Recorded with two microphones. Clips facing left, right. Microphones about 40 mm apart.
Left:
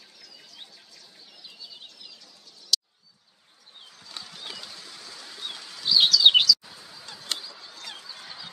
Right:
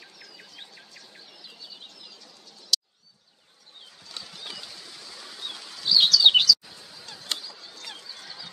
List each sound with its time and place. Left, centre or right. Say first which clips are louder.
4.0 s mechanisms: even; centre
5.1 s chirp: even; centre
6.7 s a sound: left 1 dB; left
7.1 s goose: even; centre